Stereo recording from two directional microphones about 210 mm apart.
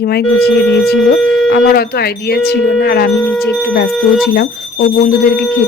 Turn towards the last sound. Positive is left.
turn(degrees=50)  # may be behind; listen again after turning